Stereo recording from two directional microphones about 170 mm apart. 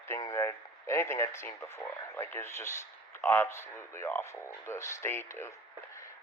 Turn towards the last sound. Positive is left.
turn(degrees=15)  # may be behind; listen again after turning